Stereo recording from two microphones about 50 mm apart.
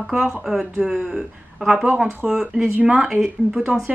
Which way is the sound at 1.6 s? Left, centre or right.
Right.